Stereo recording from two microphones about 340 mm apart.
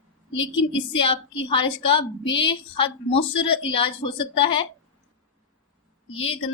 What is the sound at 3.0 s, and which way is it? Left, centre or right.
Speech, left.